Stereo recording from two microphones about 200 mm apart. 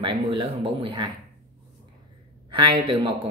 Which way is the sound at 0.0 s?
25° right (ahead or behind).